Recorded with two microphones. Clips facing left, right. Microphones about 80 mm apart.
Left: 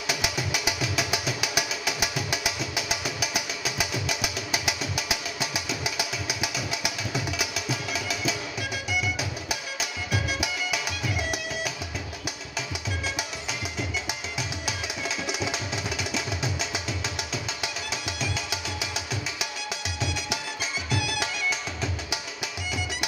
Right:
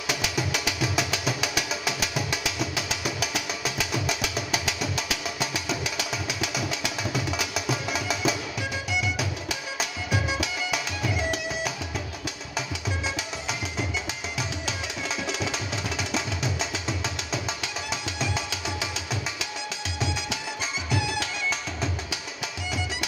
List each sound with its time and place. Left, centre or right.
0.2 s music: centre
20.9 s music: right